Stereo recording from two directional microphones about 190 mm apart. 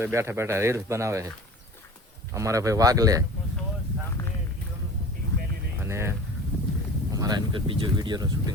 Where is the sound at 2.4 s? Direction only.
15° right (ahead or behind).